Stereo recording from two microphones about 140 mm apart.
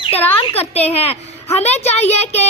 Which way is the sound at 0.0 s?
45° left (ahead or behind).